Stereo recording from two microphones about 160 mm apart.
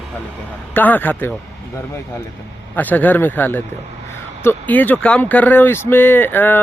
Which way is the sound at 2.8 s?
10° left (ahead or behind).